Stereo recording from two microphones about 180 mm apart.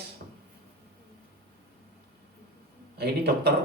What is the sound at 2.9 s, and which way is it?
Speech, 65° right (ahead or behind).